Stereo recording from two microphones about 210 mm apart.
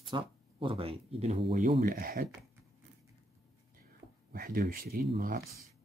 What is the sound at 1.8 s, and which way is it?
Speech, 45° right (ahead or behind).